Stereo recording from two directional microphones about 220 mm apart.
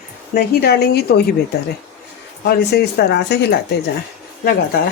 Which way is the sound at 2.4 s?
45° left (ahead or behind).